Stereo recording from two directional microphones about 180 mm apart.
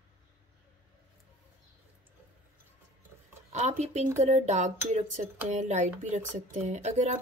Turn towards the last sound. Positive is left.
turn(degrees=-40)  # may be behind; listen again after turning